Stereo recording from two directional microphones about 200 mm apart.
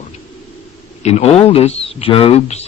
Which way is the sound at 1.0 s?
30° left (ahead or behind).